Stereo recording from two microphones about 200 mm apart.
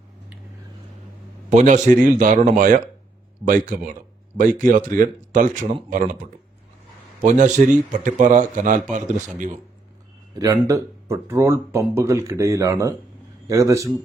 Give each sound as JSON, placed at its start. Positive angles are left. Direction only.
{"t": 1.5, "sound": "a man's voice", "side_deg": -35}
{"t": 7.2, "sound": "a man's voice", "side_deg": -40}
{"t": 10.3, "sound": "speech", "side_deg": -15}